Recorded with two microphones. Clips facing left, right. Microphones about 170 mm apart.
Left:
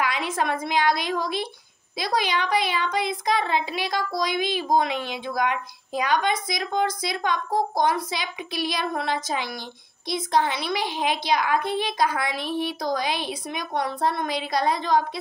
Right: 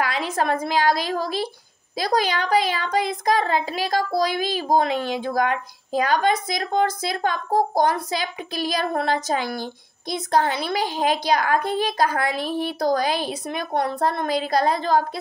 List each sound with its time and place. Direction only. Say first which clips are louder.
0.0 s a woman's voice: right 2 dB; 35° right (ahead or behind)
8.6 s a sound: right 4 dB; 45° right (ahead or behind)
10.4 s a woman's voice: right 3 dB; 45° right (ahead or behind)